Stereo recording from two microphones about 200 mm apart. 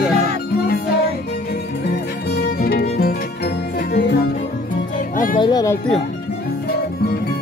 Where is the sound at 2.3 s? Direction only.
55° left (ahead or behind).